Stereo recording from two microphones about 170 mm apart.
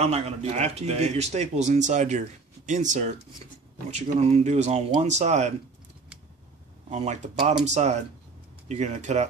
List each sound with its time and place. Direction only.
0.0 s speech: 40° right (ahead or behind)
6.9 s speech: 40° right (ahead or behind)